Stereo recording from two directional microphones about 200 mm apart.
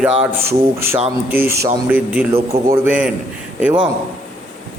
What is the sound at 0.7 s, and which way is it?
A man's voice, 10° right (ahead or behind).